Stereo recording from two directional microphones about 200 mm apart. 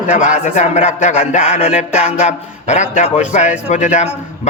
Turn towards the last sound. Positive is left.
turn(degrees=35)  # may be behind; listen again after turning